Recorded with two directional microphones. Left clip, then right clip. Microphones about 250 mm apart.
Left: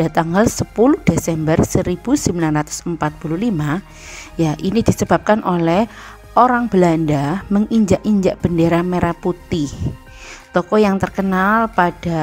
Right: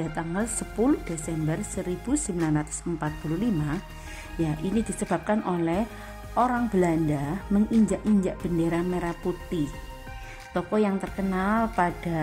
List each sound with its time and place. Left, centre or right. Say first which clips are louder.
0.0 s speech: left 15 dB; left